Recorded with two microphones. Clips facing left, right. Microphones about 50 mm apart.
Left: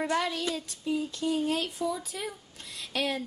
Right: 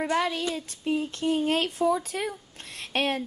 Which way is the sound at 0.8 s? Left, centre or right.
Right.